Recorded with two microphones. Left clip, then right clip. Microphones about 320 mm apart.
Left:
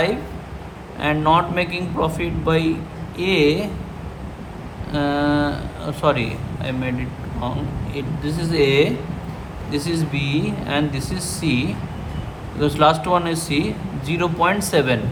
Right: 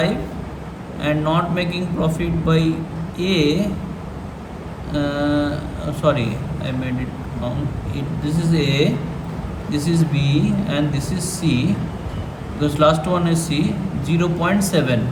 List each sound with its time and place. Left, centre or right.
1.0 s speech: left
4.9 s speech: left
7.9 s speech: left